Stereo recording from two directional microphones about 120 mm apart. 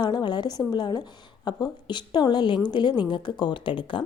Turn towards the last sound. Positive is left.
turn(degrees=45)  # may be behind; listen again after turning